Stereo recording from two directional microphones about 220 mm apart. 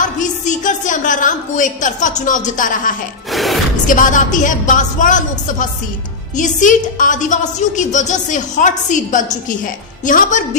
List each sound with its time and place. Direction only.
0.0 s a woman's voice: 35° left (ahead or behind)
3.3 s music: centre (ahead or behind)
3.8 s a woman's voice: 35° left (ahead or behind)